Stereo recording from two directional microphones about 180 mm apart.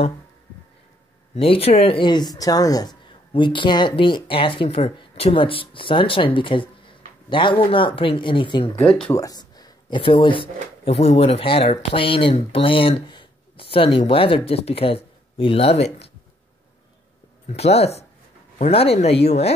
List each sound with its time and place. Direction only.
1.3 s speech: 35° left (ahead or behind)
8.7 s speech: 5° left (ahead or behind)
9.1 s speech: 20° left (ahead or behind)
17.5 s speech: 35° left (ahead or behind)